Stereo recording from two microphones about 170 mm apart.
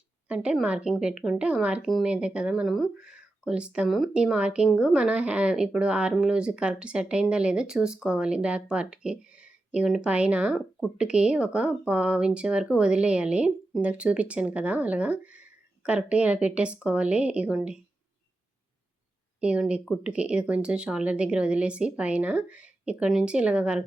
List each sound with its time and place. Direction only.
0.3 s speech: 5° right (ahead or behind)
19.4 s speech: 5° right (ahead or behind)